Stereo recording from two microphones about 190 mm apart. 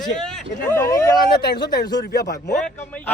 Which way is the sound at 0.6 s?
15° left (ahead or behind).